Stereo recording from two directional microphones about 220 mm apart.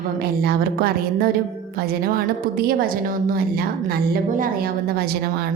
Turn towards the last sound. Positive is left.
turn(degrees=-45)  # may be behind; listen again after turning